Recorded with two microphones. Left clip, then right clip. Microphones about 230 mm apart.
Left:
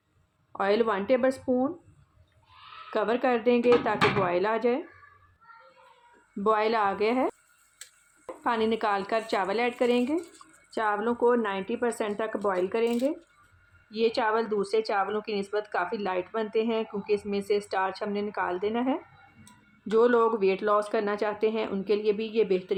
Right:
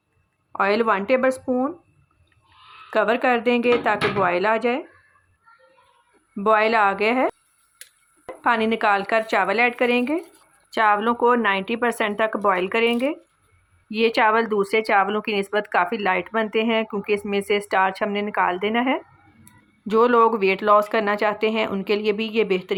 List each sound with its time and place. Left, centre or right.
0.5 s speech: centre
2.9 s speech: centre
6.4 s speech: centre